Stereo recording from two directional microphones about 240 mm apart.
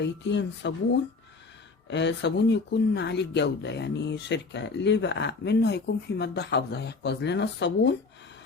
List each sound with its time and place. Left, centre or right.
0.0 s speech: left
1.9 s speech: left